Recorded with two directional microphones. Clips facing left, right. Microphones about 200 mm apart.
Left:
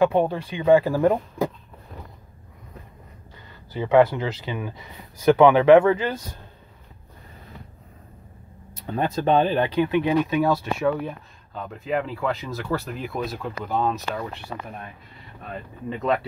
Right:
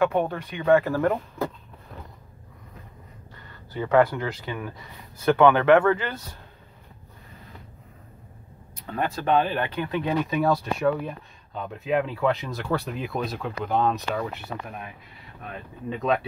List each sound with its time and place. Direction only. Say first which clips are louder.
0.0 s speech: left 3 dB; 30° left (ahead or behind)
0.6 s speech: left 3 dB; 15° left (ahead or behind)
3.7 s speech: left 3 dB; 15° left (ahead or behind)
8.9 s speech: left 3 dB; 25° left (ahead or behind)
10.2 s speech: left 2 dB; centre (ahead or behind)
15.5 s speech: left 1 dB; centre (ahead or behind)